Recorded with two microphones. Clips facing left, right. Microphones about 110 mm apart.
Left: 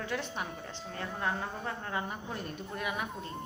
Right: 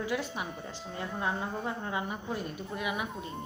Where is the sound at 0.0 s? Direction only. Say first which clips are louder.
Right 3 dB; 10° right (ahead or behind).